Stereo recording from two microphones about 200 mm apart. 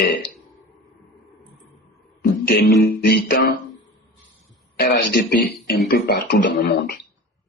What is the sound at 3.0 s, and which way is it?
Speech, 55° left (ahead or behind).